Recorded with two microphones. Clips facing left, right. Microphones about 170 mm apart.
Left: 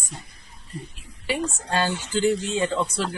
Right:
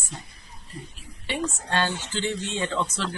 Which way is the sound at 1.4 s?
10° left (ahead or behind).